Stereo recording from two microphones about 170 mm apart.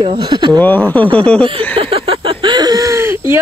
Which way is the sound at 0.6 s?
10° left (ahead or behind).